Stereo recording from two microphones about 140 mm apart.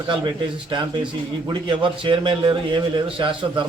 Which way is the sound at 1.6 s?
35° right (ahead or behind).